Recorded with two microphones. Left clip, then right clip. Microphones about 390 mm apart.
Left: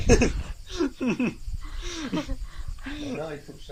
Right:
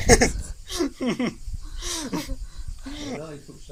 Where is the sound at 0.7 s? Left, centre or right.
Right.